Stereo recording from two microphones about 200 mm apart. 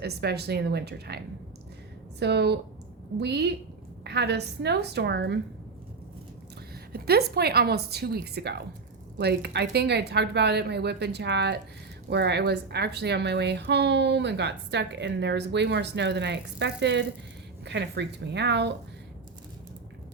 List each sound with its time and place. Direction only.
0.0 s a woman's voice: 55° right (ahead or behind)
6.9 s a woman's voice: 50° right (ahead or behind)